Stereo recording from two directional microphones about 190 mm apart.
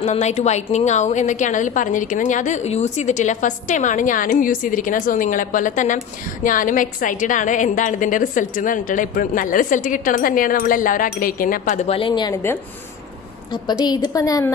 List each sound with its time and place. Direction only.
0.0 s a woman's voice: 35° left (ahead or behind)
13.8 s a woman's voice: 20° left (ahead or behind)